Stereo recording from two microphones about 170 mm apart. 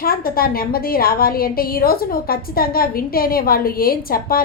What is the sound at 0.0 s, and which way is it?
A woman's voice, 60° left (ahead or behind).